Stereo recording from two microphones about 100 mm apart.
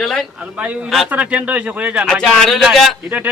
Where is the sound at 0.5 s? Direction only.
10° right (ahead or behind).